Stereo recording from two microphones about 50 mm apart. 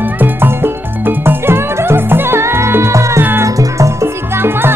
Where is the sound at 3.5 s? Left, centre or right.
Right.